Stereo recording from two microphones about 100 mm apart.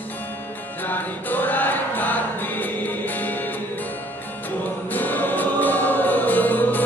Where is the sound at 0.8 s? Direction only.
20° left (ahead or behind).